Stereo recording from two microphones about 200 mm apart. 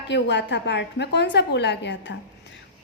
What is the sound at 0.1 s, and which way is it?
A woman's voice, 60° left (ahead or behind).